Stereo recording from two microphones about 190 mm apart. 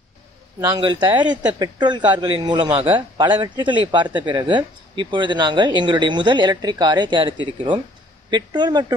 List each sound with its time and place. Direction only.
0.6 s a man's voice: 20° right (ahead or behind)